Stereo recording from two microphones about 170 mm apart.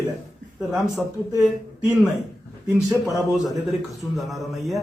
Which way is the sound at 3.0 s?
Centre (ahead or behind).